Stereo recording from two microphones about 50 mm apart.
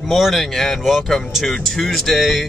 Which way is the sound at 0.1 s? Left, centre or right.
Centre.